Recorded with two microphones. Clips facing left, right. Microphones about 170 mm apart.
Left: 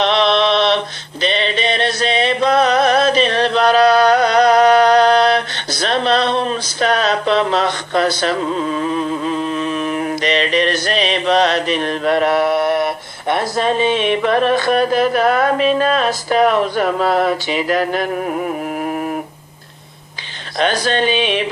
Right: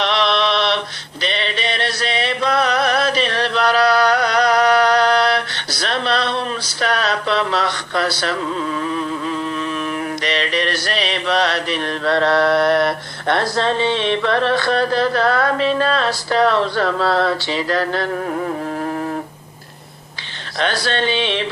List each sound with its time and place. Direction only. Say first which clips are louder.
0.0 s mantra: left 4 dB; 20° left (ahead or behind)
1.2 s music: left 5 dB; 20° left (ahead or behind)
20.6 s a sound: left 4 dB; 15° left (ahead or behind)